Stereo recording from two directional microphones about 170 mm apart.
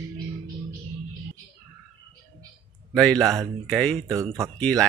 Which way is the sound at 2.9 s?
5° left (ahead or behind).